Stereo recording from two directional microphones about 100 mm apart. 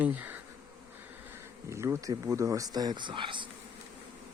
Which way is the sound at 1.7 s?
30° right (ahead or behind).